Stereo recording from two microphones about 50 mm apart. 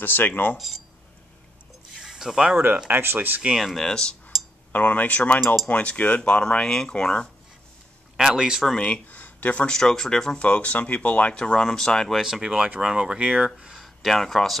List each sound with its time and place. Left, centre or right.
0.0 s speech: left
2.0 s a sound: centre
2.5 s speech: right
3.5 s speech: centre
3.8 s speech: centre
4.7 s speech: left
6.4 s speech: centre
8.2 s speech: centre
8.7 s speech: centre
9.1 s a sound: left
9.7 s speech: centre
10.4 s speech: left; by 12.2 s centre
12.2 s speech: centre
13.7 s speech: centre